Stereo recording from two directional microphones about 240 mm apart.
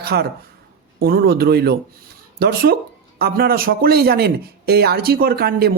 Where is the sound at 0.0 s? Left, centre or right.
Right.